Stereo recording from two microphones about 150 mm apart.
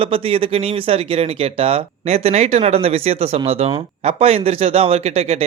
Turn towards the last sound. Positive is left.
turn(degrees=-45)  # may be behind; listen again after turning